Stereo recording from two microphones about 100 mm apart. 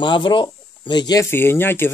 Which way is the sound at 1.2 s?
25° left (ahead or behind).